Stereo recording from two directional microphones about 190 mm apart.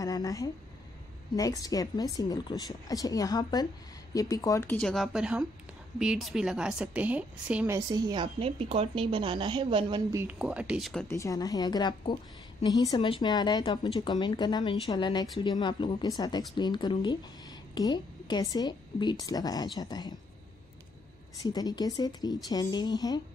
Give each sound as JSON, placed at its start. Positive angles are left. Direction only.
{"t": 0.0, "sound": "a woman's voice", "side_deg": 20}
{"t": 10.1, "sound": "a woman's voice", "side_deg": -10}
{"t": 11.1, "sound": "a woman's voice", "side_deg": 15}
{"t": 21.4, "sound": "a woman's voice", "side_deg": 20}